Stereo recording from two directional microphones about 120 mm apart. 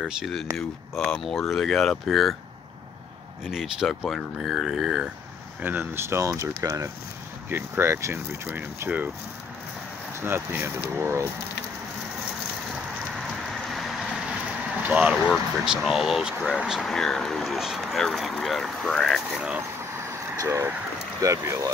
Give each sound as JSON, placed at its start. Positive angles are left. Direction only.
{"t": 0.0, "sound": "speech", "side_deg": 0}
{"t": 3.4, "sound": "speech", "side_deg": -5}
{"t": 5.6, "sound": "speech", "side_deg": -15}
{"t": 7.4, "sound": "speech", "side_deg": -15}
{"t": 10.2, "sound": "speech", "side_deg": -20}
{"t": 13.1, "sound": "rain", "side_deg": 0}
{"t": 14.8, "sound": "speech", "side_deg": -15}
{"t": 20.4, "sound": "speech", "side_deg": -20}